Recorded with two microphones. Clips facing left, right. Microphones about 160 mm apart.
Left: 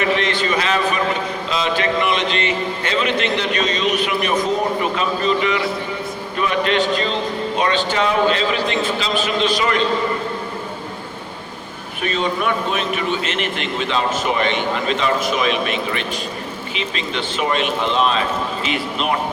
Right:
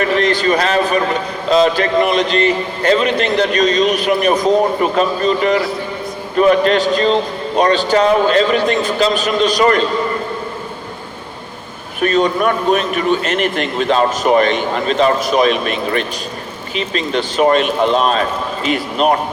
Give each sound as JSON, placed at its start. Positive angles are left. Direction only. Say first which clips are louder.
{"t": 0.0, "sound": "a man's voice", "louder": "right 5 dB", "side_deg": -40}
{"t": 12.0, "sound": "a man's voice", "louder": "right 6 dB", "side_deg": -45}